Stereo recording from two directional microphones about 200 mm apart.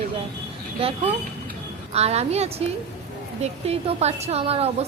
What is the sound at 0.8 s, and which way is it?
A woman's voice, 30° right (ahead or behind).